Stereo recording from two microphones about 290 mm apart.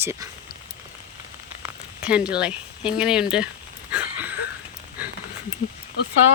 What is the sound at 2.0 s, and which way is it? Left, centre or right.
Speech, centre.